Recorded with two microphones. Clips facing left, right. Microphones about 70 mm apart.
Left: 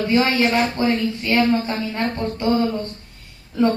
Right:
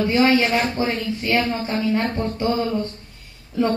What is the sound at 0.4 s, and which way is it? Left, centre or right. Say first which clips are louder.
Speech: left 2 dB; left.